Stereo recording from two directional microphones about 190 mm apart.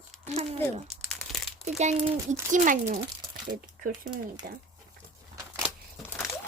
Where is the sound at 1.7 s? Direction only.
35° right (ahead or behind).